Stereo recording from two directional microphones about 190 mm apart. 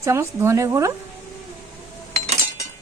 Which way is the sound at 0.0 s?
15° right (ahead or behind).